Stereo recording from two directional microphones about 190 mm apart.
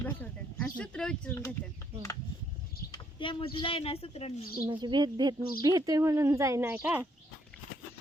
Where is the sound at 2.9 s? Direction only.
25° left (ahead or behind).